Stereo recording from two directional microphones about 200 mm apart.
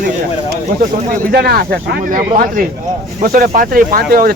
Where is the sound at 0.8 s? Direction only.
50° right (ahead or behind).